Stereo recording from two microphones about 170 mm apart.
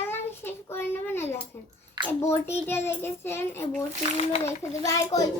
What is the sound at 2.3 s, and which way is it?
A child's voice, 15° left (ahead or behind).